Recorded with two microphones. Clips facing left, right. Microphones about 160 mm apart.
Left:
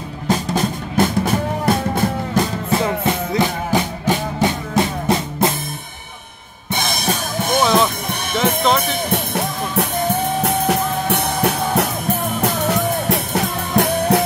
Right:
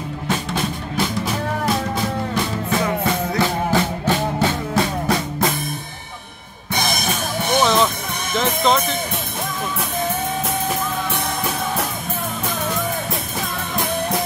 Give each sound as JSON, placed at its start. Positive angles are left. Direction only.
{"t": 0.3, "sound": "music", "side_deg": 40}
{"t": 2.7, "sound": "music", "side_deg": 25}
{"t": 7.5, "sound": "music", "side_deg": 0}
{"t": 9.1, "sound": "music", "side_deg": 70}